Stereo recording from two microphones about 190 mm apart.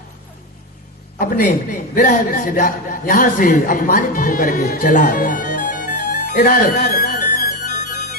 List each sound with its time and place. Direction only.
1.2 s a man's voice: 45° left (ahead or behind)